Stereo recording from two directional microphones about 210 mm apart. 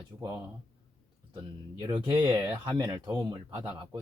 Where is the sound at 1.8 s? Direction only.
20° right (ahead or behind).